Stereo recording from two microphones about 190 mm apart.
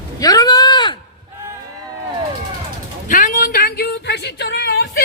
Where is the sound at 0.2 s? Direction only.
20° left (ahead or behind).